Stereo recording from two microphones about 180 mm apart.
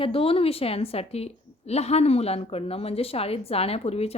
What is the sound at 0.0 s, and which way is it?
A woman's voice, 30° left (ahead or behind).